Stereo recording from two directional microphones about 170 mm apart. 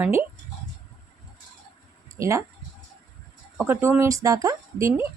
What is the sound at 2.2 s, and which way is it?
Speech, 15° right (ahead or behind).